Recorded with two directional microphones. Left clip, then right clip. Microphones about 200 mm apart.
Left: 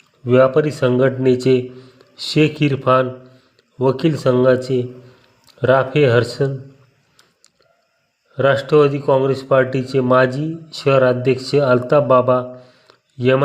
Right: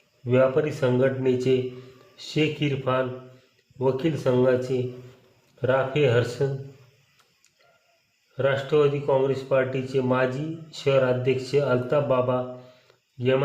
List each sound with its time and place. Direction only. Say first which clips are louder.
0.3 s speech: left 8 dB; 30° left (ahead or behind)
8.4 s speech: left 8 dB; 25° left (ahead or behind)
12.9 s a sound: left 8 dB; 25° left (ahead or behind)